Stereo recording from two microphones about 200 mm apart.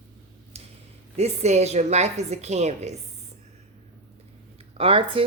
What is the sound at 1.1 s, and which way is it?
A woman's voice, 35° right (ahead or behind).